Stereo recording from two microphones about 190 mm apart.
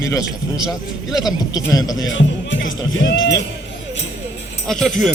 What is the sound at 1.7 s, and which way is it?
Speech, 20° left (ahead or behind).